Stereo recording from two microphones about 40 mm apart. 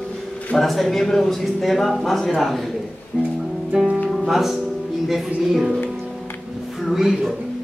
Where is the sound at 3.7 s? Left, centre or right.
Right.